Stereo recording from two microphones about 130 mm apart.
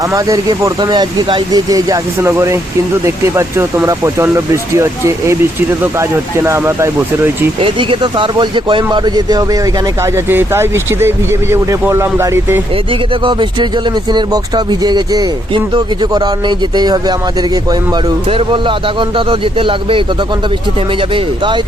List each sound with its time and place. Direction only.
0.0 s speech: 25° right (ahead or behind)
0.8 s speech: 35° right (ahead or behind); by 6.9 s 20° right (ahead or behind)
7.6 s speech: 40° right (ahead or behind); by 12.6 s 20° right (ahead or behind)
12.9 s speech: 40° right (ahead or behind)
18.3 s speech: 40° right (ahead or behind)
21.1 s speech: 40° right (ahead or behind)